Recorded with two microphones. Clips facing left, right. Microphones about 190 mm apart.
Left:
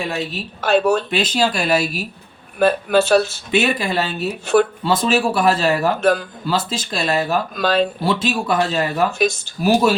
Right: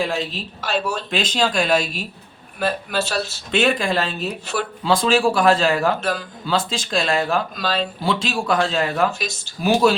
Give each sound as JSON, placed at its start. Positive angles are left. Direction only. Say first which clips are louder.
{"t": 0.0, "sound": "speech", "louder": "right 1 dB", "side_deg": 5}
{"t": 0.6, "sound": "speech", "louder": "left 8 dB", "side_deg": 50}
{"t": 1.1, "sound": "speech", "louder": "left 2 dB", "side_deg": 5}
{"t": 2.6, "sound": "speech", "louder": "left 7 dB", "side_deg": 50}
{"t": 3.5, "sound": "speech", "louder": "even", "side_deg": 5}
{"t": 4.5, "sound": "speech", "louder": "left 12 dB", "side_deg": 50}
{"t": 4.8, "sound": "speech", "louder": "even", "side_deg": 5}
{"t": 6.0, "sound": "speech", "louder": "left 8 dB", "side_deg": 55}
{"t": 6.5, "sound": "speech", "louder": "even", "side_deg": 5}
{"t": 7.5, "sound": "speech", "louder": "left 6 dB", "side_deg": 55}
{"t": 8.0, "sound": "speech", "louder": "left 2 dB", "side_deg": 5}
{"t": 9.1, "sound": "speech", "louder": "left 11 dB", "side_deg": 50}